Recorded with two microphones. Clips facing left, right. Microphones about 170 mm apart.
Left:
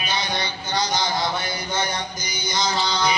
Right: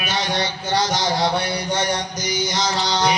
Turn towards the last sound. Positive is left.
turn(degrees=-80)